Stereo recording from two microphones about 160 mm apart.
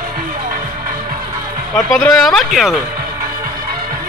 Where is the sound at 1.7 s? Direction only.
5° left (ahead or behind).